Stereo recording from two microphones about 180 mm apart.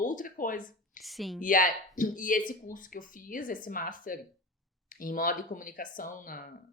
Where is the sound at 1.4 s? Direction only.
50° left (ahead or behind).